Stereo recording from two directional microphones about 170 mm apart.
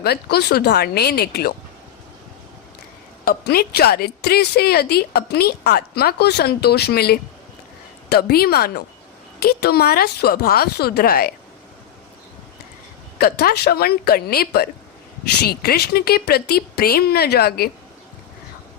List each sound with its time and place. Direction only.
0.0 s speech: 70° left (ahead or behind)
3.2 s speech: 65° left (ahead or behind)
13.1 s speech: 65° left (ahead or behind)